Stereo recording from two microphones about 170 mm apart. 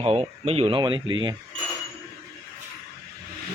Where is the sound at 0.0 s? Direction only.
35° right (ahead or behind).